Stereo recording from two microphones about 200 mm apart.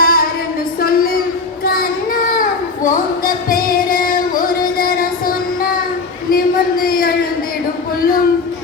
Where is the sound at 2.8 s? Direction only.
45° left (ahead or behind).